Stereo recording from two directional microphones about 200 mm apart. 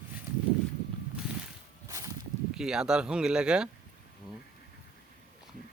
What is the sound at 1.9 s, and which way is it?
Walk, 15° right (ahead or behind).